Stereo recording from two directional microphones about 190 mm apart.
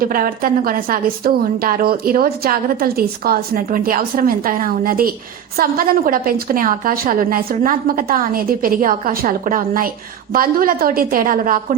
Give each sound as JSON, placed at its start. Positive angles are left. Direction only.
{"t": 0.0, "sound": "a woman's voice", "side_deg": -50}